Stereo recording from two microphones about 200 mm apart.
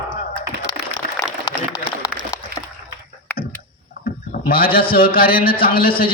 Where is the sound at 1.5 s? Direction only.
20° left (ahead or behind).